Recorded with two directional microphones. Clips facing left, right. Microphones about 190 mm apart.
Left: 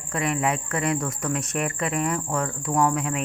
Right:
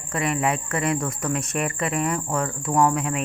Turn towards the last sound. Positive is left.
turn(degrees=-20)  # may be behind; listen again after turning